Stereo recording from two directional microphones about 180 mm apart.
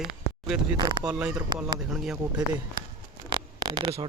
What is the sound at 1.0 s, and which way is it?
A man's voice, 5° right (ahead or behind).